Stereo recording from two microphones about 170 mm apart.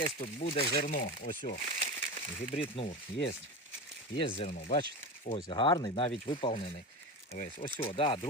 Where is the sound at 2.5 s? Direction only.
35° left (ahead or behind).